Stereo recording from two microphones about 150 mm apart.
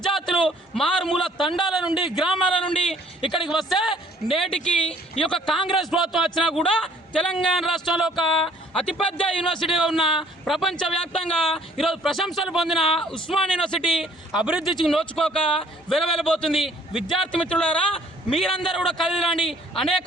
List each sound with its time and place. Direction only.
0.0 s a sound: centre (ahead or behind)
2.6 s a sound: 35° left (ahead or behind)
3.2 s speech: 35° left (ahead or behind)
3.5 s a man's voice: centre (ahead or behind)
4.4 s speech: 40° left (ahead or behind)
5.3 s a man's voice: centre (ahead or behind)